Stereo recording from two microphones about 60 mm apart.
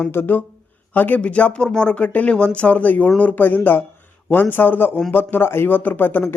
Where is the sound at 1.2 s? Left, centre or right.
Centre.